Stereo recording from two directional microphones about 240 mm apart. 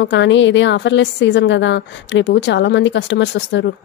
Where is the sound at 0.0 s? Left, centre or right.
Left.